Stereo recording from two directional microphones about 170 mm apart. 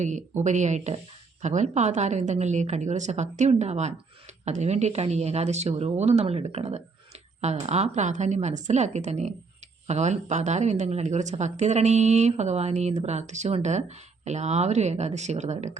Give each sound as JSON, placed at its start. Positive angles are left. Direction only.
{"t": 0.0, "sound": "a woman's voice", "side_deg": -45}